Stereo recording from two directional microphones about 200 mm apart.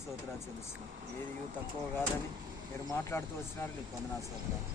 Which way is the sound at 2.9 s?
10° left (ahead or behind).